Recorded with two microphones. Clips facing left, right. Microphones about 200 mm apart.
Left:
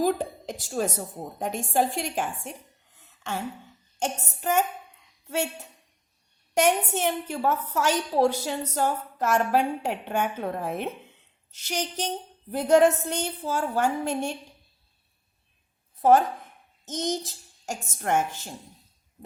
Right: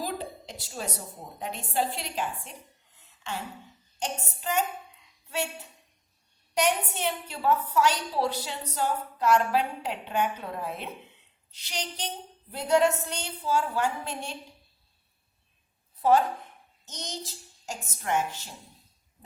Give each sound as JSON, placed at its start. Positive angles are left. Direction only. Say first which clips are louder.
{"t": 0.0, "sound": "a woman's voice", "louder": "left 9 dB", "side_deg": 50}
{"t": 4.0, "sound": "a woman's voice", "louder": "left 4 dB", "side_deg": 50}
{"t": 6.5, "sound": "a woman's voice", "louder": "left 4 dB", "side_deg": 45}
{"t": 16.0, "sound": "a woman's voice", "louder": "left 3 dB", "side_deg": 50}